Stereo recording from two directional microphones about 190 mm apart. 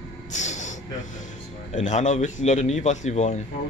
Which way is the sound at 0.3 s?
40° left (ahead or behind).